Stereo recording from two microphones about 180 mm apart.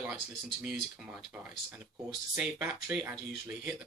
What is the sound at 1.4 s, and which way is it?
Speech, 5° right (ahead or behind).